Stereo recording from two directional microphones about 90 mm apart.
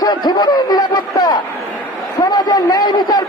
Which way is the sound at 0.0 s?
50° left (ahead or behind).